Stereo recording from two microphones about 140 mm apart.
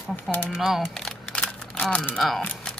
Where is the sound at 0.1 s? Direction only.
15° left (ahead or behind).